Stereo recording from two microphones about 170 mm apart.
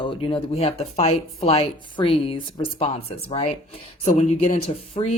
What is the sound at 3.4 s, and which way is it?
Speech, 45° left (ahead or behind).